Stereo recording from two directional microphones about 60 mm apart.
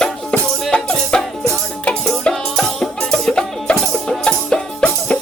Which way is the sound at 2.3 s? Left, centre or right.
Centre.